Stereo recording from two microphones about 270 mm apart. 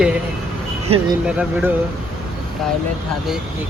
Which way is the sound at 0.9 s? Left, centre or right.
Right.